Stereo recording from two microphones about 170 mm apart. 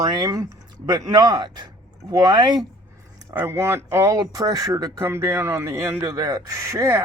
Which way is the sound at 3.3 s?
15° right (ahead or behind).